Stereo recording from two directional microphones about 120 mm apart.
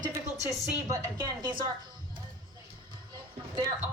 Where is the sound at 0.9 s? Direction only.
35° right (ahead or behind).